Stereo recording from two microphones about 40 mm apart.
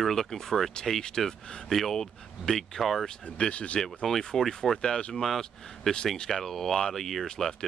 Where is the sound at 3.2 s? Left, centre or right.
Left.